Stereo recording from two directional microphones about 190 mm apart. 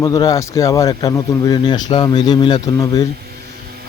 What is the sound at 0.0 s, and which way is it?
Speech, 20° left (ahead or behind).